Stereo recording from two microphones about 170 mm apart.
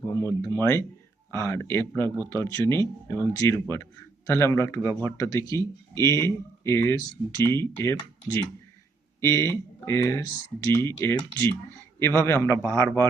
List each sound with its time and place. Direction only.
0.4 s speech: 15° left (ahead or behind)